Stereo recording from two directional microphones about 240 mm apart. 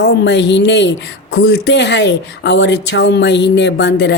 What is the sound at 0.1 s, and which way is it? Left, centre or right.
Speech, left.